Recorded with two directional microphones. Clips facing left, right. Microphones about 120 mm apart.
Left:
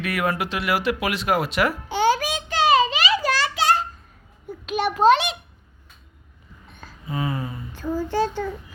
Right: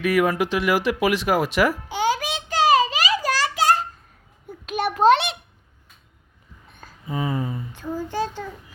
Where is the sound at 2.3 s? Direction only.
30° right (ahead or behind); by 5.3 s 60° right (ahead or behind).